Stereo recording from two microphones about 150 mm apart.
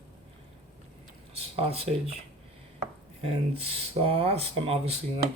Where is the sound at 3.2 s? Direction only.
40° right (ahead or behind).